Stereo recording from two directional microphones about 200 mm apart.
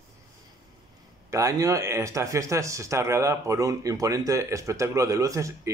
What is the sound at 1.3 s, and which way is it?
Speech, 15° right (ahead or behind).